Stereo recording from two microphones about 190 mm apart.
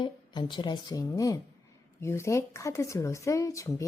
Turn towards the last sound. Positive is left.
turn(degrees=15)  # may be behind; listen again after turning